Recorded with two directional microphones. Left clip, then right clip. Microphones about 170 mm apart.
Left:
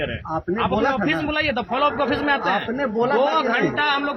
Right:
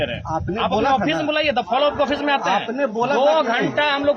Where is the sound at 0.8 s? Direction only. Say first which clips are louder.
Right 3 dB; 25° right (ahead or behind).